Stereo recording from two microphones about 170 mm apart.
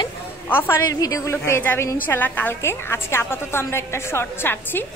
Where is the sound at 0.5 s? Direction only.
15° left (ahead or behind).